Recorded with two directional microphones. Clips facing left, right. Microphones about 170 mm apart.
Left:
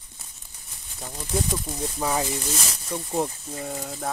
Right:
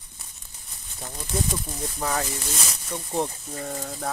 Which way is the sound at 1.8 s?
10° left (ahead or behind).